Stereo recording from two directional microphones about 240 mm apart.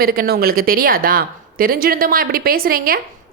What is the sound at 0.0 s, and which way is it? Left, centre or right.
A woman's voice, right.